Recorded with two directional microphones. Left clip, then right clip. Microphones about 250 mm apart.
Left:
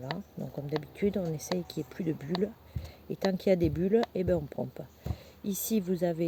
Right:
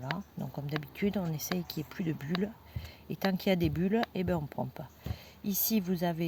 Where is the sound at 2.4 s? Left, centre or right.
Right.